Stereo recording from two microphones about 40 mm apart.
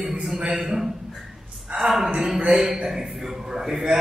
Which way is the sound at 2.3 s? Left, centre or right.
Right.